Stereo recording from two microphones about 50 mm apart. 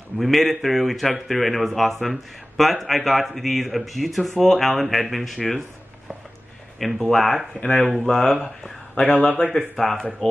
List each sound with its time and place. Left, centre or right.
0.2 s a man's voice: centre
6.8 s a man's voice: centre
7.6 s speech: centre